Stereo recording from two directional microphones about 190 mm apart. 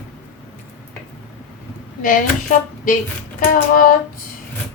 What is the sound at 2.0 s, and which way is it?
Speech, 45° left (ahead or behind).